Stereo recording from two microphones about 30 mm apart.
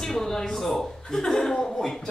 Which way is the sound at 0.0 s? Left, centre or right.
Centre.